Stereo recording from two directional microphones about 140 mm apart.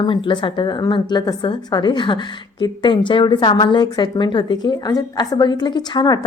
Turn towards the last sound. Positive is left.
turn(degrees=30)  # may be behind; listen again after turning